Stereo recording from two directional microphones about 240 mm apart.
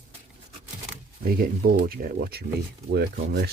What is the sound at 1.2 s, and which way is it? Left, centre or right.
Speech, right.